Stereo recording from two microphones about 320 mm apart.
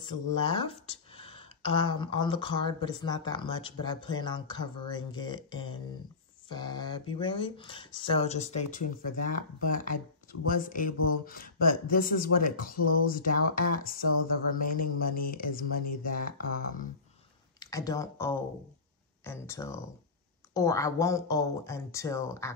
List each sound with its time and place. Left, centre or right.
0.0 s speech: centre
12.7 s speech: left
13.5 s speech: left
17.6 s speech: centre